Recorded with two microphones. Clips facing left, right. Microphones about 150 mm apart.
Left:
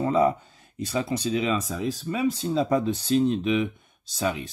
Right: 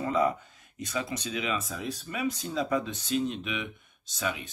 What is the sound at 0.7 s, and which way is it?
Speech, 30° left (ahead or behind).